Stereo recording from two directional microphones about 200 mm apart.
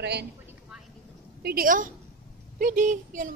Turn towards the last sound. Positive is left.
turn(degrees=-40)  # may be behind; listen again after turning